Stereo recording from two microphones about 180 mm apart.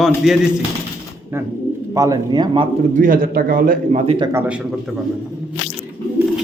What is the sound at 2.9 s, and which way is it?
Speech, 50° right (ahead or behind).